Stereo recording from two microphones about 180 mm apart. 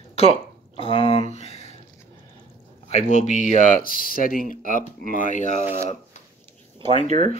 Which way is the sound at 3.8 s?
50° left (ahead or behind).